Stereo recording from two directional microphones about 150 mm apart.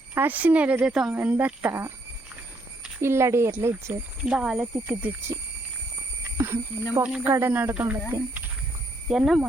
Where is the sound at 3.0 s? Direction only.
15° right (ahead or behind).